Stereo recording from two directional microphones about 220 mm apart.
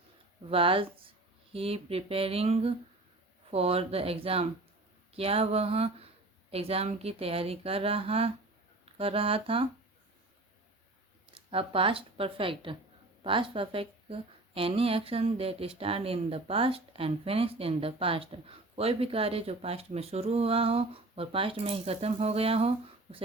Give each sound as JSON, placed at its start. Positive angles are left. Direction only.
{"t": 0.5, "sound": "a woman's voice", "side_deg": -25}
{"t": 11.3, "sound": "a woman's voice", "side_deg": -25}